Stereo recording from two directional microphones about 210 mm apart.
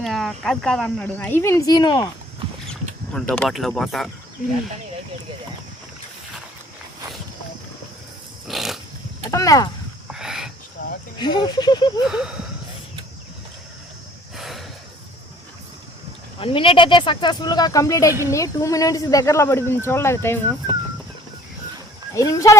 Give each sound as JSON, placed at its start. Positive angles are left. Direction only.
{"t": 0.0, "sound": "speech", "side_deg": 0}
{"t": 2.6, "sound": "speech", "side_deg": 5}
{"t": 8.4, "sound": "dog", "side_deg": 0}
{"t": 9.3, "sound": "speech", "side_deg": 15}
{"t": 10.1, "sound": "a sound", "side_deg": -5}
{"t": 11.2, "sound": "speech", "side_deg": 20}
{"t": 12.0, "sound": "a sound", "side_deg": -5}
{"t": 14.3, "sound": "snort", "side_deg": 0}
{"t": 16.4, "sound": "speech", "side_deg": 25}
{"t": 22.1, "sound": "speech", "side_deg": 15}